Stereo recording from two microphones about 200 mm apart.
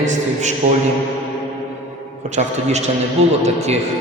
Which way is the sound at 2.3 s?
35° right (ahead or behind).